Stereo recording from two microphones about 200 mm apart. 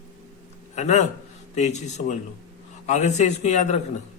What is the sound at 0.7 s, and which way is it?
Speech, 35° left (ahead or behind).